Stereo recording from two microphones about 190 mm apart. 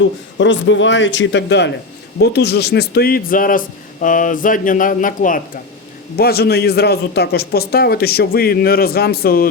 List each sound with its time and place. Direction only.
0.3 s a man's voice: 75° left (ahead or behind); by 5.4 s 45° left (ahead or behind)
6.1 s speech: 55° left (ahead or behind)